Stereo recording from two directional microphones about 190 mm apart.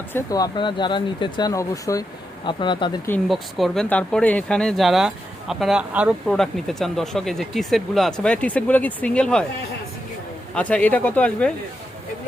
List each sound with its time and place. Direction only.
0.1 s speech: 20° left (ahead or behind)
3.2 s speech: centre (ahead or behind)
10.5 s speech: 5° left (ahead or behind)